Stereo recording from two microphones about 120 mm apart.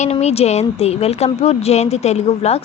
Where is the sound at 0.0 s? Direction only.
65° left (ahead or behind).